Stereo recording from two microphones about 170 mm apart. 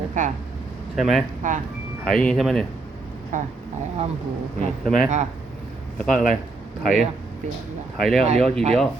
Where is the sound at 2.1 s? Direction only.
5° left (ahead or behind).